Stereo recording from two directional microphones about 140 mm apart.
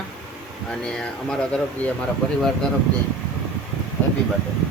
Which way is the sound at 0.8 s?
5° left (ahead or behind).